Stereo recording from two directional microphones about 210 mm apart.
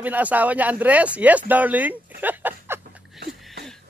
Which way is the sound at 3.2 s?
55° right (ahead or behind).